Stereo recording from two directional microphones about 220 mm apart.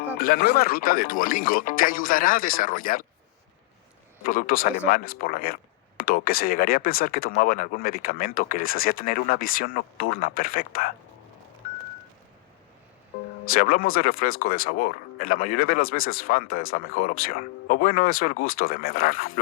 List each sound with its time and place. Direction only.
0.2 s speech: 40° left (ahead or behind)
4.2 s speech: 40° left (ahead or behind)
13.5 s speech: 40° left (ahead or behind)